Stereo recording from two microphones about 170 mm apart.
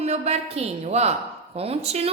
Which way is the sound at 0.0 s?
40° right (ahead or behind).